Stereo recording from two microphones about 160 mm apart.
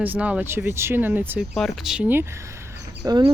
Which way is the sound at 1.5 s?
Centre (ahead or behind).